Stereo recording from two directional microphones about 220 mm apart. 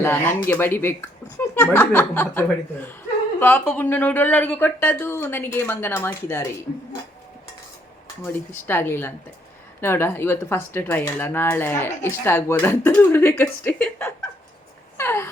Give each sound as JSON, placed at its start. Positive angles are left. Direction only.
{"t": 0.0, "sound": "speech", "side_deg": 10}
{"t": 8.2, "sound": "speech", "side_deg": 10}
{"t": 14.9, "sound": "dog", "side_deg": 10}